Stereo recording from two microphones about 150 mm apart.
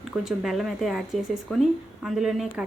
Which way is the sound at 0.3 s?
Centre (ahead or behind).